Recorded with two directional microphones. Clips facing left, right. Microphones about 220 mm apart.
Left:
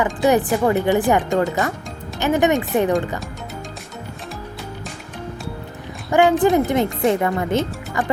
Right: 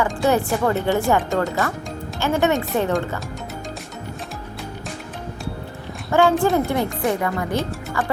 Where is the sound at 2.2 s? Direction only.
15° left (ahead or behind).